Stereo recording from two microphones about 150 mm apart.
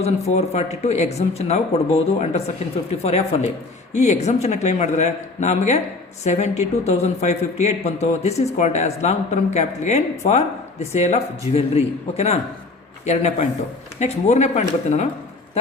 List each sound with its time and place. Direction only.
0.0 s speech: 45° left (ahead or behind)